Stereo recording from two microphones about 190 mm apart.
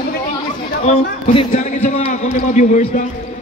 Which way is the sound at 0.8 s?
35° left (ahead or behind).